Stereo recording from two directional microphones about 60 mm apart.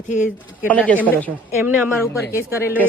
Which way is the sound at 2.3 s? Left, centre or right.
Right.